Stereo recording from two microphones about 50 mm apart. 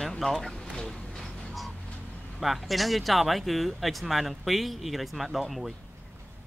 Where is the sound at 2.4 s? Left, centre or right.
Centre.